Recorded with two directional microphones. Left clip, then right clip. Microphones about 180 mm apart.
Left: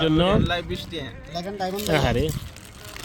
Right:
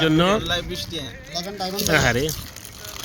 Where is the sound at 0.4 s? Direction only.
20° left (ahead or behind); by 2.3 s centre (ahead or behind).